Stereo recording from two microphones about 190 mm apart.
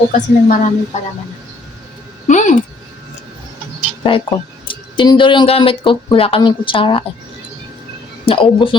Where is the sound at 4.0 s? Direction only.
25° left (ahead or behind).